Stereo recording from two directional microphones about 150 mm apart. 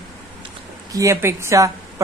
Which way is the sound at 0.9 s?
20° right (ahead or behind).